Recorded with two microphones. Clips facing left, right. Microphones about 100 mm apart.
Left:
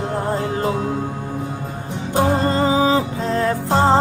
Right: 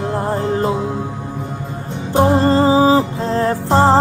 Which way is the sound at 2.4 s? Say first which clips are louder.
Right 5 dB; 35° right (ahead or behind).